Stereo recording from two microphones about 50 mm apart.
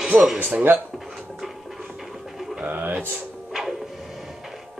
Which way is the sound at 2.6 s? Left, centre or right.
Right.